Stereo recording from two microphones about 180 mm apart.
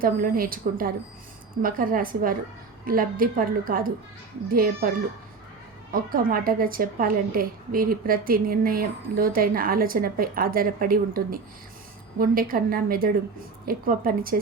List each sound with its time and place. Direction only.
0.0 s a woman's voice: 50° right (ahead or behind)
5.9 s a woman's voice: 55° right (ahead or behind)